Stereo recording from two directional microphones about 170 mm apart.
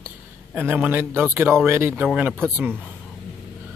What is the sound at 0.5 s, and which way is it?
Speech, 10° right (ahead or behind).